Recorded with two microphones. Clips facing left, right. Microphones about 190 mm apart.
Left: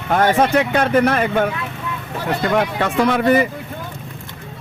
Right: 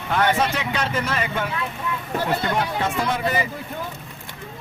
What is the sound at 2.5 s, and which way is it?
Speech, 65° left (ahead or behind).